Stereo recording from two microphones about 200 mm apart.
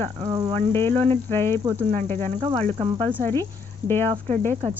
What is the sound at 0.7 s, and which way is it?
Speech, 10° left (ahead or behind).